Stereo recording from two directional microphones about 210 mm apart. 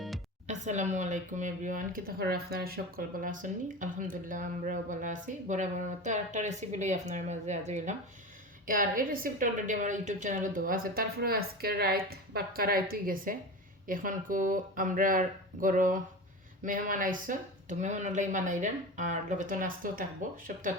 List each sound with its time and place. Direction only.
0.4 s speech: 35° right (ahead or behind)